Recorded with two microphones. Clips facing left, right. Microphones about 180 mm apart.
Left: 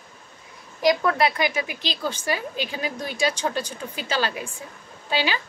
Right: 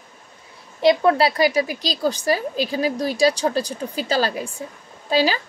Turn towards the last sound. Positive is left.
turn(degrees=-40)  # may be behind; listen again after turning